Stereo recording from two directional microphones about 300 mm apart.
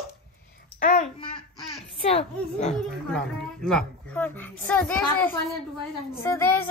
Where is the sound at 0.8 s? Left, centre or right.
Left.